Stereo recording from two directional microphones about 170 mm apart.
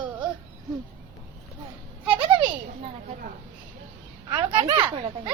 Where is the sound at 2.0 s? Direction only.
30° right (ahead or behind).